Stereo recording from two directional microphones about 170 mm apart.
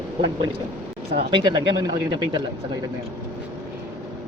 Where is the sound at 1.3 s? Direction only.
30° right (ahead or behind).